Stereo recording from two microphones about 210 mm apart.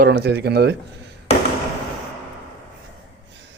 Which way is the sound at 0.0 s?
55° right (ahead or behind).